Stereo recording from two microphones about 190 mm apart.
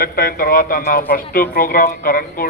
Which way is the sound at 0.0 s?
50° left (ahead or behind).